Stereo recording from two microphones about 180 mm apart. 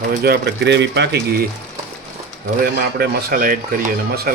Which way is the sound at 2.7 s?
60° right (ahead or behind).